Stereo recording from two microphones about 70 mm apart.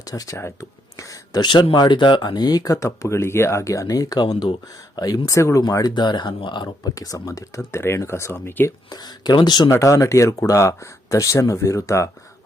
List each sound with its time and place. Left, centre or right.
0.0 s a sound: left
1.4 s speech: left
5.8 s speech: left
8.9 s speech: left
9.6 s speech: left